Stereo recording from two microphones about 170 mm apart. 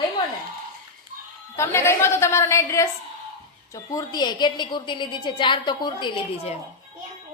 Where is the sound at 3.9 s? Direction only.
25° left (ahead or behind).